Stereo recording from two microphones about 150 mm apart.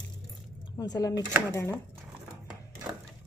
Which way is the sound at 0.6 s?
25° left (ahead or behind).